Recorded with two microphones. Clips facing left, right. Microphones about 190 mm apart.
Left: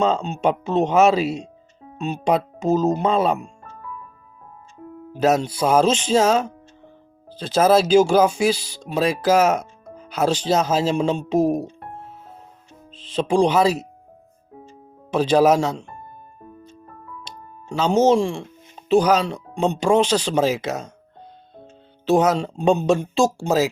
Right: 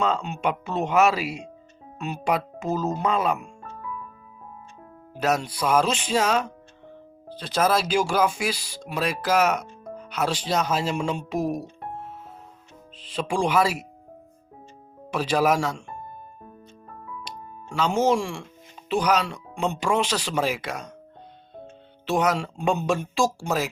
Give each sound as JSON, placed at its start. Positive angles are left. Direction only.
{"t": 0.0, "sound": "speech", "side_deg": 25}
{"t": 5.2, "sound": "speech", "side_deg": 25}
{"t": 7.4, "sound": "speech", "side_deg": 30}
{"t": 10.5, "sound": "speech", "side_deg": 25}
{"t": 13.1, "sound": "speech", "side_deg": 20}
{"t": 15.1, "sound": "speech", "side_deg": 25}
{"t": 17.7, "sound": "speech", "side_deg": 25}
{"t": 22.1, "sound": "speech", "side_deg": 30}